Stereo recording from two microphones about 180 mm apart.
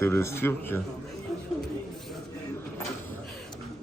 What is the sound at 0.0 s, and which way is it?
Speech, 15° left (ahead or behind).